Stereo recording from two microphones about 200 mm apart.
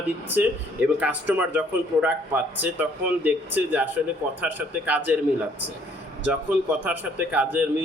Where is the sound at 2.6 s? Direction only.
10° right (ahead or behind).